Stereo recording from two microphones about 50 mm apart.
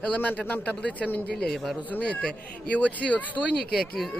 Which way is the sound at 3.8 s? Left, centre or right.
Centre.